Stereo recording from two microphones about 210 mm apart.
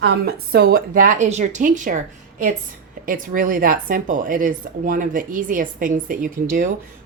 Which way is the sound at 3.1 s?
40° right (ahead or behind).